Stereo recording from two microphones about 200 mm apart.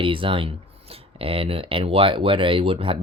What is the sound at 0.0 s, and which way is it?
Speech, 25° right (ahead or behind).